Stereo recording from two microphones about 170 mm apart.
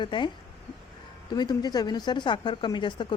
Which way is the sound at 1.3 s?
25° left (ahead or behind).